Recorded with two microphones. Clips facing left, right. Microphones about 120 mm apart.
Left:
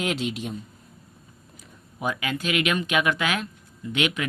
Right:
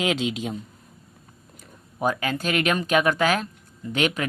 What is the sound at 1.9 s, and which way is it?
Speech, 40° right (ahead or behind).